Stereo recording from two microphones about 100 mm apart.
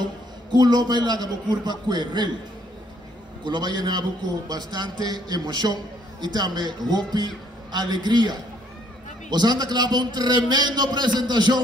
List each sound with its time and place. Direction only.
0.5 s a man's voice: 45° right (ahead or behind)
3.4 s a man's voice: 45° right (ahead or behind)